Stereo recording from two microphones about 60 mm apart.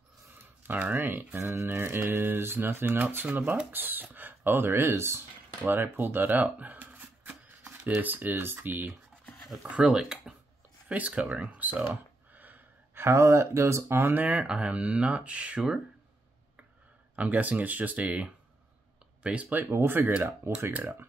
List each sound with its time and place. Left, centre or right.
0.3 s a sound: right
1.0 s speech: right
5.6 s speech: right
6.4 s shuffling cards: right
9.7 s speech: centre
10.9 s speech: right
11.9 s a sound: right
13.0 s speech: right
13.9 s speech: right
14.2 s speech: centre
17.1 s speech: right
19.5 s speech: right